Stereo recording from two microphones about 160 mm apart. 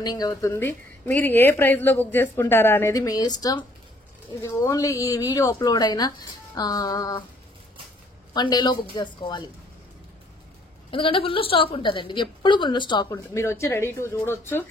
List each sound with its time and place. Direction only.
0.0 s a woman's voice: 25° left (ahead or behind)
8.3 s speech: 25° left (ahead or behind)
10.9 s a woman's voice: 35° left (ahead or behind)
13.1 s a woman's voice: 15° left (ahead or behind)